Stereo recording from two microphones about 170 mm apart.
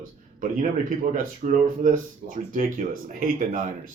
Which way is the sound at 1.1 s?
50° right (ahead or behind).